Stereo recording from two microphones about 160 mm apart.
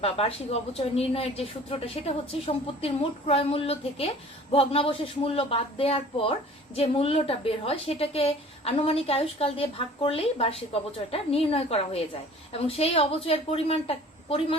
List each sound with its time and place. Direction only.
0.0 s a woman's voice: 35° left (ahead or behind)